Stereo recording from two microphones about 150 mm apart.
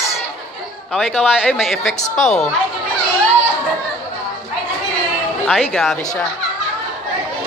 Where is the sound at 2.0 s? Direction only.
55° left (ahead or behind).